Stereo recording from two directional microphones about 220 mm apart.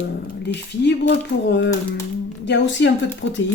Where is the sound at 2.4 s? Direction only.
55° left (ahead or behind).